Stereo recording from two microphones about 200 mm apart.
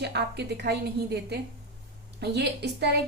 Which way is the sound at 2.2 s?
55° right (ahead or behind).